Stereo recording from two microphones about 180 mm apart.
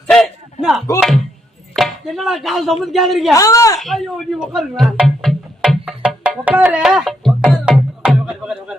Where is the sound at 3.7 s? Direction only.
Centre (ahead or behind).